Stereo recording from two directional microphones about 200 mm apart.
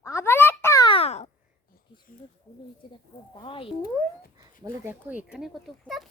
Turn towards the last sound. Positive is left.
turn(degrees=0)  # may be behind; listen again after turning